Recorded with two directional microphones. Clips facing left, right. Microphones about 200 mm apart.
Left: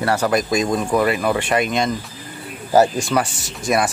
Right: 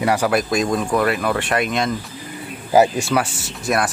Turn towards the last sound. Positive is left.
turn(degrees=-5)  # may be behind; listen again after turning